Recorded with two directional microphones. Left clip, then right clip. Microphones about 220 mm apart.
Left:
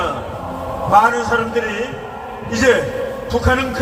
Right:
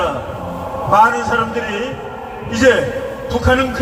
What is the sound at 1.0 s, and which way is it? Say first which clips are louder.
Speech: right 1 dB; 25° left (ahead or behind).